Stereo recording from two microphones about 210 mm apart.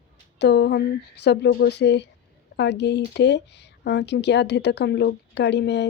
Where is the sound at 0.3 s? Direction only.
55° left (ahead or behind).